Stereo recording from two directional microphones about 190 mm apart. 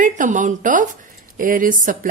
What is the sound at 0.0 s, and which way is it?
Speech, 40° right (ahead or behind).